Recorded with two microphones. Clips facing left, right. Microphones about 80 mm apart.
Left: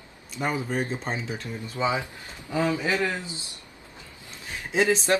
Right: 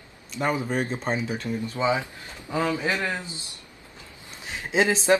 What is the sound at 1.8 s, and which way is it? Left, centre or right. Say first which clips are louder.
A man's voice: even; centre.